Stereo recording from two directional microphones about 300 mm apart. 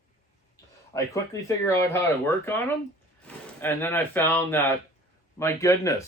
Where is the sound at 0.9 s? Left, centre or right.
Centre.